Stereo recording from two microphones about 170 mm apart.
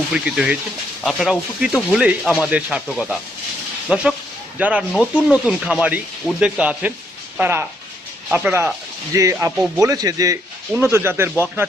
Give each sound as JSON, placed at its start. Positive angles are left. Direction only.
{"t": 0.1, "sound": "speech", "side_deg": -5}